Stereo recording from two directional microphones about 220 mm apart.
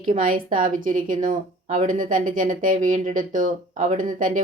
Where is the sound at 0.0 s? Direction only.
40° right (ahead or behind).